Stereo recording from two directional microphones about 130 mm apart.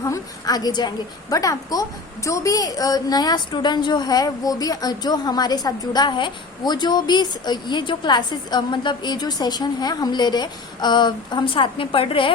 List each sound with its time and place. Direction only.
0.0 s a woman's voice: 25° left (ahead or behind); by 12.3 s 45° left (ahead or behind)